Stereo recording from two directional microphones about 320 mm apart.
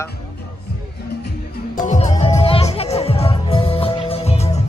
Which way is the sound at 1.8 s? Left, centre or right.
Left.